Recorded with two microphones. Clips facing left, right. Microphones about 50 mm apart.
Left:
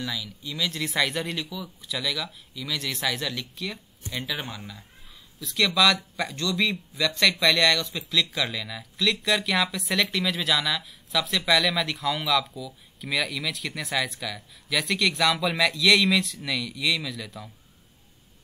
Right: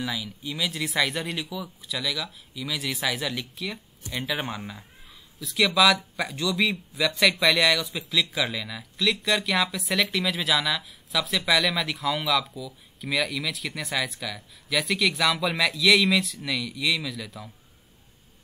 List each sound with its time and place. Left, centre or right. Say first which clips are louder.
0.0 s speech: right 2 dB; centre
4.4 s speech: right 4 dB; right
5.4 s speech: right 1 dB; centre